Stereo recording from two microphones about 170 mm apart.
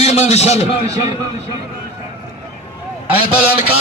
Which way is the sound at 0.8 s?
20° right (ahead or behind).